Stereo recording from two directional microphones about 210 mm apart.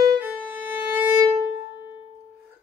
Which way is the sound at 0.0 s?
15° right (ahead or behind).